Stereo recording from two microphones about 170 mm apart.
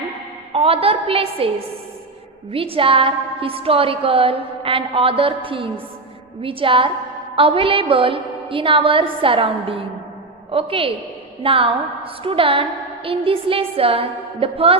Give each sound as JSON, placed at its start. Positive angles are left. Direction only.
{"t": 0.5, "sound": "a woman's voice", "side_deg": -35}
{"t": 2.5, "sound": "a woman's voice", "side_deg": -35}